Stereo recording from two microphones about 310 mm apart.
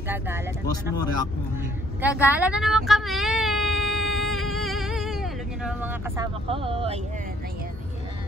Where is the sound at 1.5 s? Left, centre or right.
Centre.